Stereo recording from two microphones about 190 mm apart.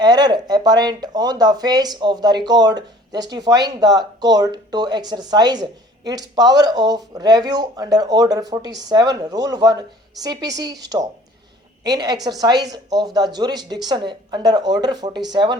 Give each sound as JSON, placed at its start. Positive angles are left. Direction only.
{"t": 0.0, "sound": "speech", "side_deg": -20}
{"t": 11.8, "sound": "speech", "side_deg": -20}